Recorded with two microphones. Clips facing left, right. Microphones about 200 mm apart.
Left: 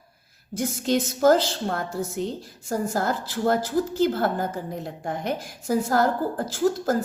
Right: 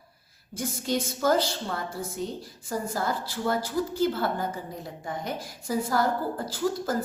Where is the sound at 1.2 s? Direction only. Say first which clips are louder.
Left 6 dB; 45° left (ahead or behind).